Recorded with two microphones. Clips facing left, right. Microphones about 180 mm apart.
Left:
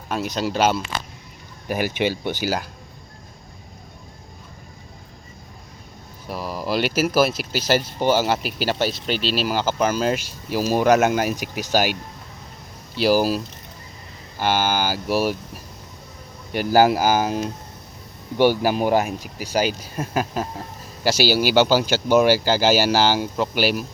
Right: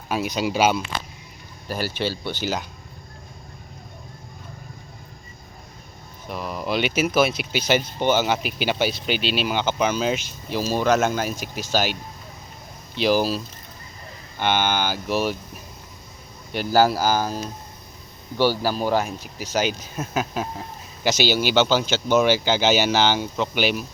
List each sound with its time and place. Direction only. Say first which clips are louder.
0.1 s speech: even; centre (ahead or behind)
1.6 s speech: left 4 dB; 15° left (ahead or behind)
6.2 s speech: left 1 dB; 5° left (ahead or behind)
13.0 s speech: left 2 dB; 5° left (ahead or behind)
16.5 s speech: left 2 dB; 15° left (ahead or behind)
18.6 s speech: left 3 dB; 15° left (ahead or behind)
20.0 s speech: left 2 dB; centre (ahead or behind)